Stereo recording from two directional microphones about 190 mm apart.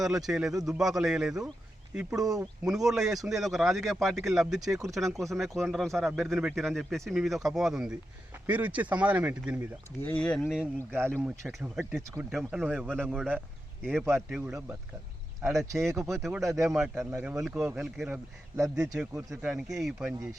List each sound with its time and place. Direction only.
0.0 s a man's voice: centre (ahead or behind)
10.0 s a man's voice: 10° left (ahead or behind); by 11.9 s 10° right (ahead or behind)
12.3 s a man's voice: centre (ahead or behind); by 16.6 s 15° right (ahead or behind)
16.6 s a man's voice: 5° right (ahead or behind)
19.5 s speech: 5° right (ahead or behind)